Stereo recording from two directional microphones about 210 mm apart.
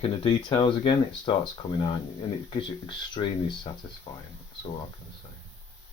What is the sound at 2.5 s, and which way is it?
Speech, 25° left (ahead or behind).